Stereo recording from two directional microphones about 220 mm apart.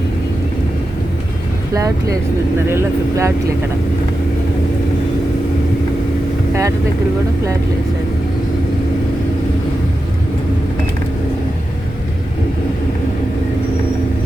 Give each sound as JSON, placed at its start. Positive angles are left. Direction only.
{"t": 1.7, "sound": "speech", "side_deg": -15}
{"t": 6.5, "sound": "speech", "side_deg": -15}